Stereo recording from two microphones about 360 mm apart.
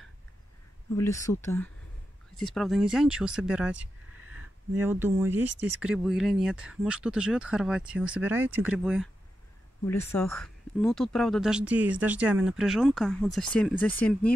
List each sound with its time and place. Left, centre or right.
0.9 s speech: centre
4.7 s speech: centre
5.4 s speech: right
5.8 s speech: centre